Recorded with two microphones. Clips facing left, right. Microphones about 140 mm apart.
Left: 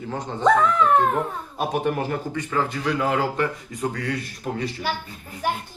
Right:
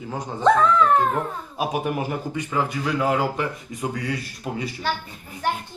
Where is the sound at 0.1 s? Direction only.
10° right (ahead or behind).